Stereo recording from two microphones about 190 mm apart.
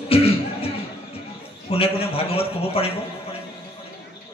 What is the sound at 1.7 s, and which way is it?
A man's voice, 30° left (ahead or behind).